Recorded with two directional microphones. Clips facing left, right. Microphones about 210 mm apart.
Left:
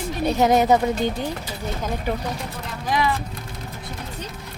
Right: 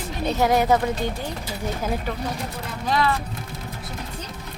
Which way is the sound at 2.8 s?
10° left (ahead or behind).